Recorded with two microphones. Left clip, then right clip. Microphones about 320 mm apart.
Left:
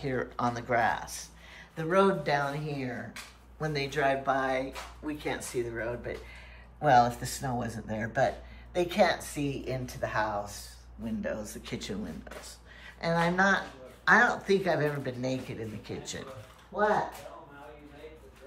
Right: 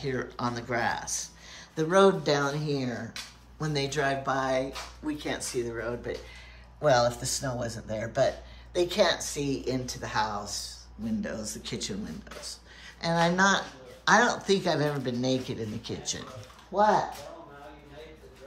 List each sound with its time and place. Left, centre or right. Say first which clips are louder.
0.0 s speech: left 1 dB; centre
16.7 s speech: right 4 dB; right